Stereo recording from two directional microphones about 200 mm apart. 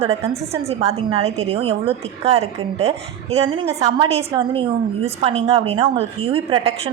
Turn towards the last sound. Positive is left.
turn(degrees=-30)  # may be behind; listen again after turning